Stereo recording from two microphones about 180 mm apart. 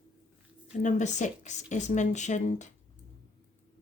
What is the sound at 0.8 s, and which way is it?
Speech, 40° left (ahead or behind).